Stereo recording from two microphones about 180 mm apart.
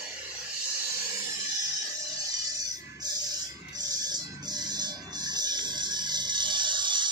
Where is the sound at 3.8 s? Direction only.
20° right (ahead or behind).